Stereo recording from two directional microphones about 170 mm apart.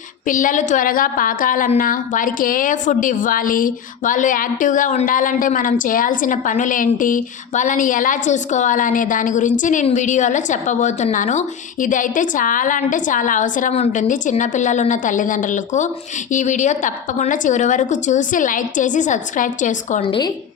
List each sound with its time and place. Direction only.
0.3 s a woman's voice: 50° left (ahead or behind)
20.0 s a woman's voice: 30° left (ahead or behind)